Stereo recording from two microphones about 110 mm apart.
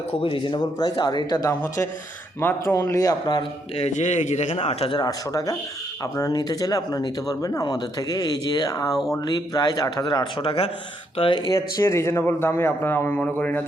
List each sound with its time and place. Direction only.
0.2 s speech: 50° left (ahead or behind); by 1.5 s 35° left (ahead or behind)
1.6 s a man's voice: 25° left (ahead or behind)
3.8 s a man's voice: 80° left; by 4.9 s 65° left (ahead or behind)
4.9 s speech: 35° left (ahead or behind)
10.4 s speech: 55° left (ahead or behind)
11.2 s speech: 45° left (ahead or behind)
11.8 s a man's voice: 25° left (ahead or behind)